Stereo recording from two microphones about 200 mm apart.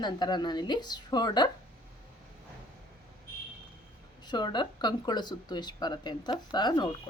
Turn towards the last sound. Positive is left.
turn(degrees=20)  # may be behind; listen again after turning